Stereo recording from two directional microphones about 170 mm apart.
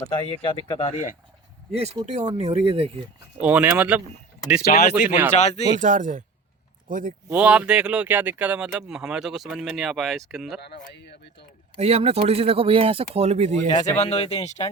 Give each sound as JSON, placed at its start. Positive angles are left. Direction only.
{"t": 0.0, "sound": "speech", "side_deg": 30}
{"t": 1.7, "sound": "speech", "side_deg": -40}
{"t": 3.4, "sound": "speech", "side_deg": -10}
{"t": 5.4, "sound": "speech", "side_deg": 40}
{"t": 5.8, "sound": "speech", "side_deg": -50}
{"t": 7.3, "sound": "speech", "side_deg": -5}
{"t": 10.6, "sound": "speech", "side_deg": 80}
{"t": 11.8, "sound": "speech", "side_deg": -40}
{"t": 13.7, "sound": "speech", "side_deg": 20}
{"t": 14.0, "sound": "speech", "side_deg": 35}